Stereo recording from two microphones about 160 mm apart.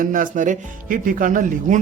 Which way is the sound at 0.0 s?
55° right (ahead or behind).